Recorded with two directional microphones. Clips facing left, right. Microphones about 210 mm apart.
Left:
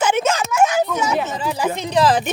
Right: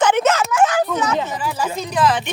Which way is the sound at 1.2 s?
20° left (ahead or behind).